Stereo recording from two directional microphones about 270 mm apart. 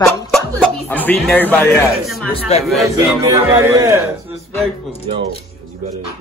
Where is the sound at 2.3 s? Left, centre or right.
Left.